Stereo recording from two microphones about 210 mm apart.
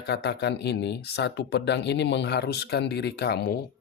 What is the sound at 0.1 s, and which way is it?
Speech, 55° left (ahead or behind).